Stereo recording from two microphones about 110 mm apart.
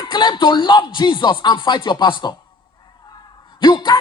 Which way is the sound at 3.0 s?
40° left (ahead or behind).